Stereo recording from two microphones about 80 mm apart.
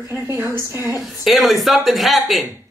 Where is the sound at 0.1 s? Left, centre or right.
Right.